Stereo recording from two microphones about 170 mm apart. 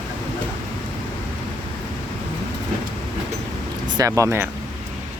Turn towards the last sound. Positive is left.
turn(degrees=-15)  # may be behind; listen again after turning